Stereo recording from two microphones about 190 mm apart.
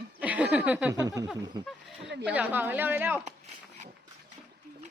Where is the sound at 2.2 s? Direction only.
10° right (ahead or behind).